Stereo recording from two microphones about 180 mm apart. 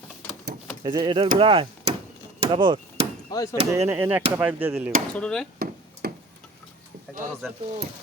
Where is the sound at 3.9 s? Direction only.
10° right (ahead or behind).